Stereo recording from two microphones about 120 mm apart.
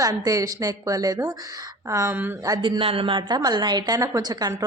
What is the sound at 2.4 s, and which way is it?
Speech, 30° right (ahead or behind).